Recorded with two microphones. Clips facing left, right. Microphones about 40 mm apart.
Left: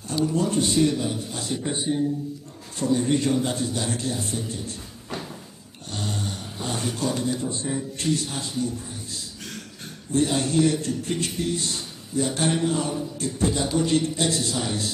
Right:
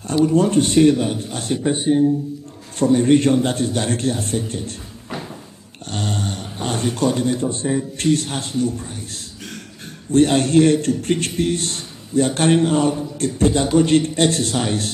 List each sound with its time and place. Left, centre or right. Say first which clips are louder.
0.1 s a man's voice: right 8 dB; right
5.9 s dog: right 6 dB; right
7.0 s a man's voice: right 8 dB; right
10.1 s a man's voice: right 8 dB; right